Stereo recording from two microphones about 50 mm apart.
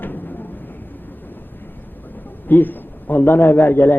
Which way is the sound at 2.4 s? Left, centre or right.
Left.